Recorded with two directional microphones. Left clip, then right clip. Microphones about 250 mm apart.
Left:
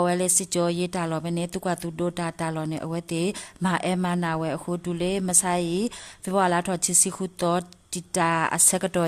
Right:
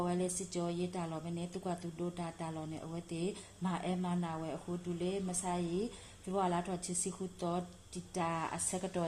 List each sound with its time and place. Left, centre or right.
0.0 s speech: left